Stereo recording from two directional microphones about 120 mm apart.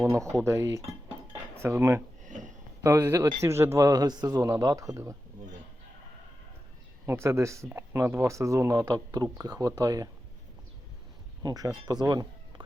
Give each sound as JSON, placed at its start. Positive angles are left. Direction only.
{"t": 0.1, "sound": "speech", "side_deg": -25}
{"t": 2.2, "sound": "a sound", "side_deg": -90}
{"t": 2.8, "sound": "speech", "side_deg": -25}
{"t": 7.0, "sound": "speech", "side_deg": -20}
{"t": 11.4, "sound": "speech", "side_deg": -30}